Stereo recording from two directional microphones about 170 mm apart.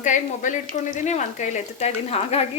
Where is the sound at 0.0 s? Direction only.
45° left (ahead or behind).